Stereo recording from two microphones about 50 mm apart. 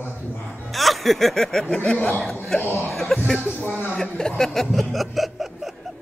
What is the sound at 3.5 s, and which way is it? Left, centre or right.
Speech, left.